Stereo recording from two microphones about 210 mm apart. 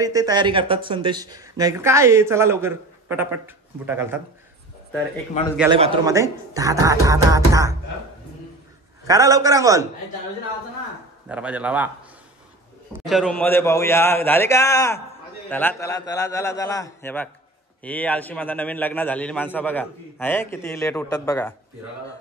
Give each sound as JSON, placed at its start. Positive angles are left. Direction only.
{"t": 0.0, "sound": "speech", "side_deg": -15}
{"t": 5.7, "sound": "speech", "side_deg": -25}
{"t": 9.0, "sound": "speech", "side_deg": -15}
{"t": 11.2, "sound": "speech", "side_deg": -5}
{"t": 13.0, "sound": "a man's voice", "side_deg": 0}